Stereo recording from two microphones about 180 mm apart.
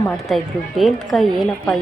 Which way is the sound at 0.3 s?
Centre (ahead or behind).